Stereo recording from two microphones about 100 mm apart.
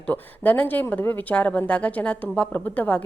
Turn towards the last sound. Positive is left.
turn(degrees=15)  # may be behind; listen again after turning